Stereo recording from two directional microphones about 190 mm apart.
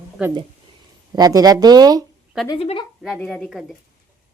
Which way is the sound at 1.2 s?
20° right (ahead or behind).